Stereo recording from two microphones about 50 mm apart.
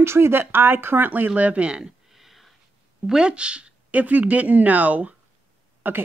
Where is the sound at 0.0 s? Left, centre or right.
Right.